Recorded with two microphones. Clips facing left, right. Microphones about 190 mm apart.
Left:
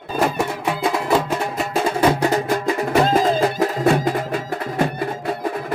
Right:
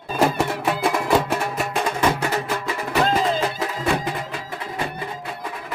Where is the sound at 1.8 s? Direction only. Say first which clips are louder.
Left 6 dB; 35° left (ahead or behind).